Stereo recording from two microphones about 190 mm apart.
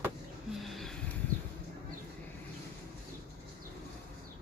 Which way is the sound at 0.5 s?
Centre (ahead or behind).